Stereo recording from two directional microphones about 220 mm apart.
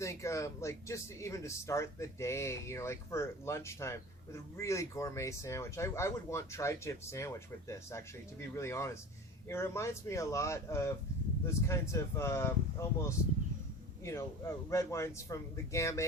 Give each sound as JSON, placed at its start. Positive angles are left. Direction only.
{"t": 0.0, "sound": "speech", "side_deg": 15}